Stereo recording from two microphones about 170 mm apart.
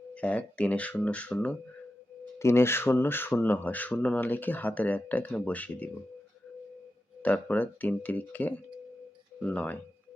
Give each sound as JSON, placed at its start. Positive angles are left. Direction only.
{"t": 0.1, "sound": "speech", "side_deg": 10}
{"t": 7.2, "sound": "speech", "side_deg": 10}